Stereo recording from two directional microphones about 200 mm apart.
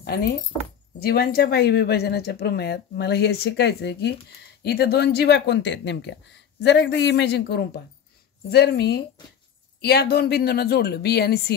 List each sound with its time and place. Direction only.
0.0 s speech: 55° left (ahead or behind)